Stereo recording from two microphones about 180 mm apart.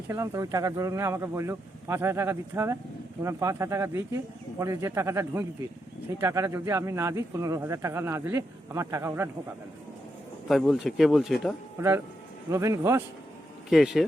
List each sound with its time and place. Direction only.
0.1 s speech: 15° right (ahead or behind)
10.5 s speech: centre (ahead or behind)
11.8 s speech: 15° right (ahead or behind)
13.7 s speech: centre (ahead or behind)